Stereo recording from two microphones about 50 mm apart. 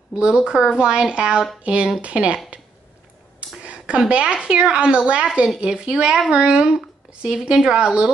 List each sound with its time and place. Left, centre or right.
0.3 s speech: centre
3.3 s a sound: right
4.1 s speech: right